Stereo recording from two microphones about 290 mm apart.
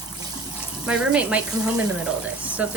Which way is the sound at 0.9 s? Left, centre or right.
Centre.